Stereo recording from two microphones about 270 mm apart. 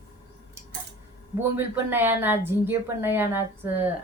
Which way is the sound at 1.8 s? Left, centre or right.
Centre.